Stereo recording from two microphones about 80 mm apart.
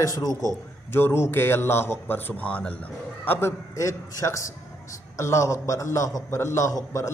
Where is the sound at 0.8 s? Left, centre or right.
Left.